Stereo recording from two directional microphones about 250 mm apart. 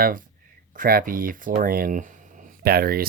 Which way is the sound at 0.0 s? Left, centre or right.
Right.